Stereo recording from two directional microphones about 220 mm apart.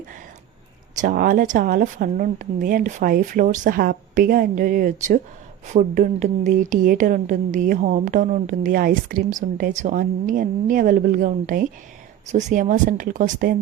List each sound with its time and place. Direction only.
0.9 s speech: 40° right (ahead or behind)